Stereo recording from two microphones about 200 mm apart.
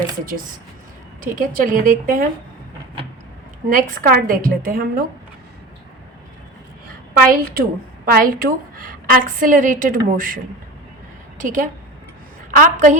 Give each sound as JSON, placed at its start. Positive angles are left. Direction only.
{"t": 1.2, "sound": "a woman's voice", "side_deg": -45}
{"t": 3.7, "sound": "a woman's voice", "side_deg": -45}
{"t": 7.1, "sound": "a woman's voice", "side_deg": -45}